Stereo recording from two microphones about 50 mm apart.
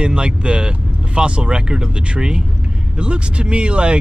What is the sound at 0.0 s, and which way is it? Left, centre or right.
A man's voice, centre.